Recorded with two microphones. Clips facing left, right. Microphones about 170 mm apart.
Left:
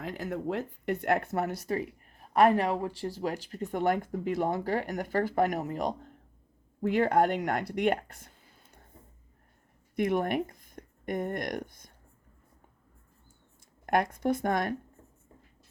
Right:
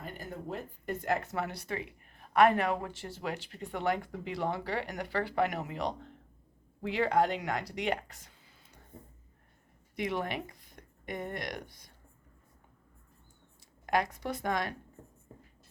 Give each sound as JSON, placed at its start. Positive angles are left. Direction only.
{"t": 0.0, "sound": "speech", "side_deg": 90}
{"t": 9.9, "sound": "speech", "side_deg": 50}
{"t": 13.8, "sound": "speech", "side_deg": 55}